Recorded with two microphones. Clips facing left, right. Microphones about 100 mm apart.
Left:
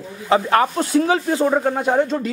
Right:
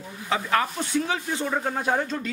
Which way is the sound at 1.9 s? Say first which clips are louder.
Left 7 dB; 25° left (ahead or behind).